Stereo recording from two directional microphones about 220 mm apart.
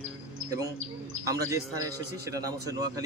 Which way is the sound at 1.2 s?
15° right (ahead or behind).